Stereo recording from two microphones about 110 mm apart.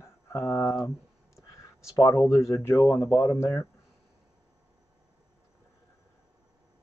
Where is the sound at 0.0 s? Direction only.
20° left (ahead or behind).